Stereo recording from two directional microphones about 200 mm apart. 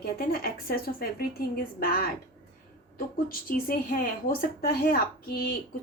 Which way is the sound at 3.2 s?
45° left (ahead or behind).